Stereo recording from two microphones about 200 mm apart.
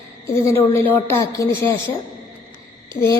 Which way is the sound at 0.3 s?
15° left (ahead or behind).